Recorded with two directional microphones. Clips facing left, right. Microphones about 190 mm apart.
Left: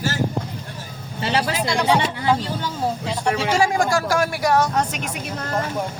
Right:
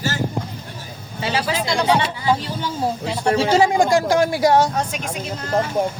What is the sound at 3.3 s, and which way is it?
Speech, 30° right (ahead or behind).